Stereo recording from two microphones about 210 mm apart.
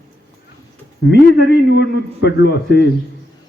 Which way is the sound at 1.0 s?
55° left (ahead or behind).